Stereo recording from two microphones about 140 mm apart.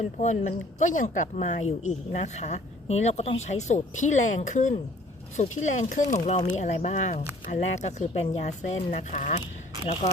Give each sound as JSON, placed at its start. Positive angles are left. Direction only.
{"t": 0.2, "sound": "speech", "side_deg": 55}